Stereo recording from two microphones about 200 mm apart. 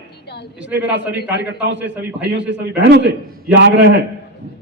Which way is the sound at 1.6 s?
65° right (ahead or behind).